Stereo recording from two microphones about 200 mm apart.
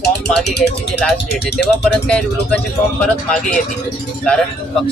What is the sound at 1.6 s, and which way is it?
A man's voice, 5° left (ahead or behind).